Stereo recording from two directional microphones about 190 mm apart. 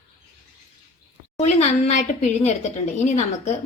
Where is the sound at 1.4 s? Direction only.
35° left (ahead or behind).